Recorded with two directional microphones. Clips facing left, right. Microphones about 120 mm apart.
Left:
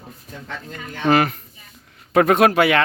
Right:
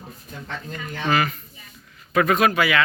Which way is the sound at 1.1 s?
60° left (ahead or behind).